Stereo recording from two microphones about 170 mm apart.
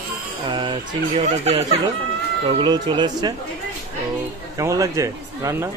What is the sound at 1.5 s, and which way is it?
Speech, 35° right (ahead or behind).